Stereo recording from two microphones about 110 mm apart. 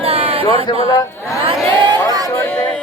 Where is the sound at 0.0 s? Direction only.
60° right (ahead or behind).